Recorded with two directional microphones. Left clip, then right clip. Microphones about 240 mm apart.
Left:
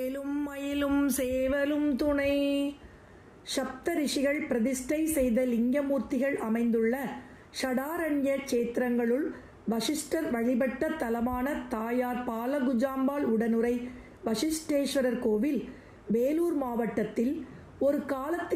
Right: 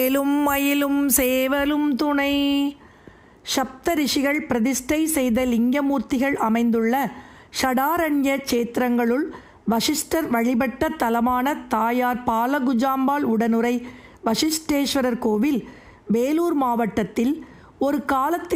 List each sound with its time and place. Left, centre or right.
0.0 s a woman's voice: right
0.9 s a sound: centre
1.1 s a woman's voice: right